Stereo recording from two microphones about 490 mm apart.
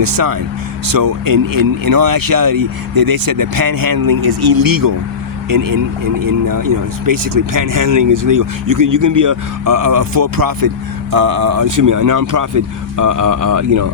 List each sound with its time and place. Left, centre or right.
0.0 s speech: right